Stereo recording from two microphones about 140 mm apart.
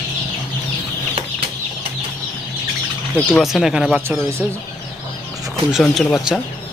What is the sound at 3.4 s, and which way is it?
Speech, centre (ahead or behind).